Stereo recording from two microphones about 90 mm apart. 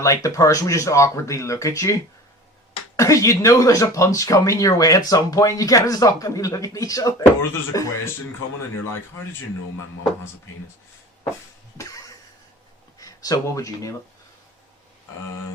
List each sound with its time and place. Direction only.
0.0 s speech: 40° left (ahead or behind)
13.0 s speech: 45° left (ahead or behind)